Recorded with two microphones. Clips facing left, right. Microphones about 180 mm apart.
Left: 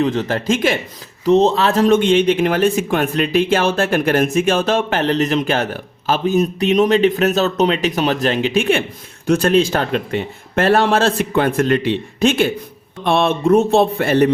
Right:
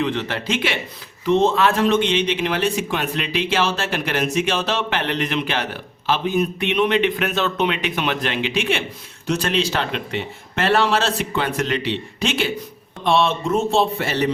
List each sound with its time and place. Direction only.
0.0 s speech: 40° left (ahead or behind)